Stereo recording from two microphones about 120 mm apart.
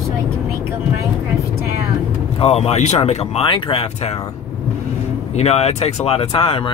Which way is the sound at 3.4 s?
45° left (ahead or behind).